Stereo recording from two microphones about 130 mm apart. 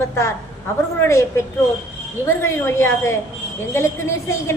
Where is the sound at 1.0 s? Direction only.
20° left (ahead or behind).